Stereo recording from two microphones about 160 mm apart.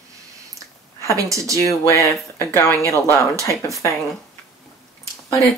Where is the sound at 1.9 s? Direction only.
20° left (ahead or behind).